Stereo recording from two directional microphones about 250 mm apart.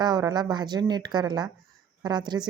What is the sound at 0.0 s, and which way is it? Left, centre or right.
A woman's voice, centre.